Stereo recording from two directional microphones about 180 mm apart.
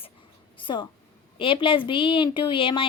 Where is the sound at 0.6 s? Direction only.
25° left (ahead or behind).